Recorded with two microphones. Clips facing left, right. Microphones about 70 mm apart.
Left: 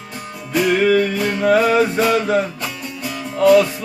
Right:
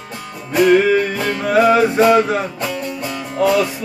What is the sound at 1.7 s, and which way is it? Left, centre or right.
Music, right.